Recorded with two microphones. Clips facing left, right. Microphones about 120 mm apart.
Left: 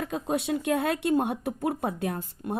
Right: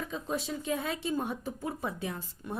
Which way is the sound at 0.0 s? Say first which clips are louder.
Left 6 dB; 65° left (ahead or behind).